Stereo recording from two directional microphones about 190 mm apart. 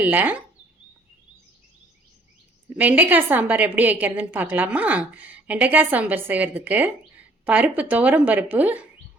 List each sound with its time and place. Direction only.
0.0 s speech: 10° right (ahead or behind)
2.6 s speech: 10° right (ahead or behind)